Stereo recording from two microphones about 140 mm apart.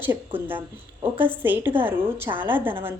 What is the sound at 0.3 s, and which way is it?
A woman's voice, 15° right (ahead or behind).